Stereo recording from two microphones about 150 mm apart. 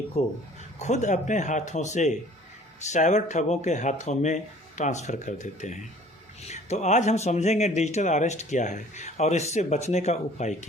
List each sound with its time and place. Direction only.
0.1 s speech: 45° left (ahead or behind)